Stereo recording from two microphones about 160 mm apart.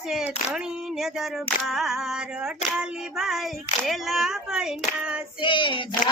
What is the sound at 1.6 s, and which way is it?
Speech, centre (ahead or behind).